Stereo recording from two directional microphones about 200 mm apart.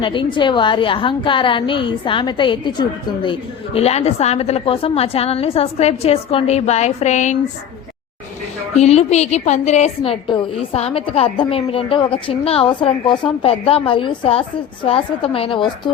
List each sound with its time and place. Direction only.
0.0 s a woman's voice: 25° left (ahead or behind)
8.7 s a woman's voice: 30° left (ahead or behind)